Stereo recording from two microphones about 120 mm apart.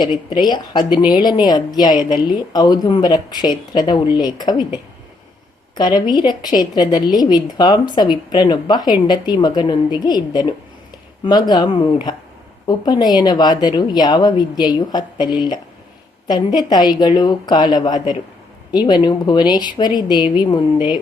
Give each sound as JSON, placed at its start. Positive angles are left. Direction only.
{"t": 0.0, "sound": "a woman's voice", "side_deg": 40}
{"t": 5.7, "sound": "a woman's voice", "side_deg": 35}